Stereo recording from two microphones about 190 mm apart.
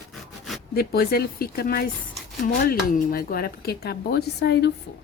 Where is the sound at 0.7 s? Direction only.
55° left (ahead or behind).